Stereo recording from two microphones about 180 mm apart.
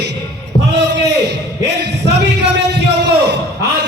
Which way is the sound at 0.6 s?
70° right (ahead or behind).